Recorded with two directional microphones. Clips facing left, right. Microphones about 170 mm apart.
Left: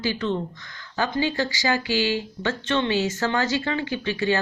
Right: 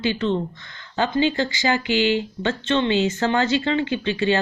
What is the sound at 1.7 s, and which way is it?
Speech, 40° left (ahead or behind).